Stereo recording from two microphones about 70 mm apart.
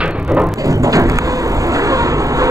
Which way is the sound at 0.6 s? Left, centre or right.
Right.